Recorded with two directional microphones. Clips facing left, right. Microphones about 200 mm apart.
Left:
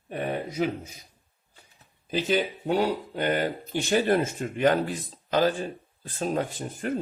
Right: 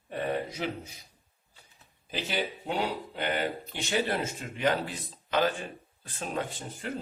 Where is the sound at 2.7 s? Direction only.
40° left (ahead or behind).